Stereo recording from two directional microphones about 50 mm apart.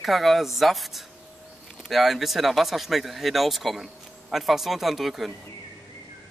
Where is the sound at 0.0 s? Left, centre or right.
Centre.